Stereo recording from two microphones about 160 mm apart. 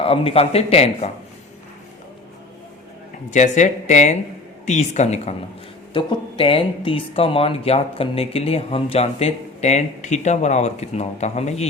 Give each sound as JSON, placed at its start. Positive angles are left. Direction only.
{"t": 0.0, "sound": "speech", "side_deg": 35}
{"t": 3.2, "sound": "speech", "side_deg": 45}
{"t": 5.9, "sound": "speech", "side_deg": 30}